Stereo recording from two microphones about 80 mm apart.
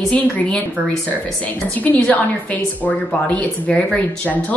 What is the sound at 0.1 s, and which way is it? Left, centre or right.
Speech, centre.